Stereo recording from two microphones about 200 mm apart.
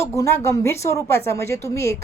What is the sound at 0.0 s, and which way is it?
A woman's voice, 15° left (ahead or behind).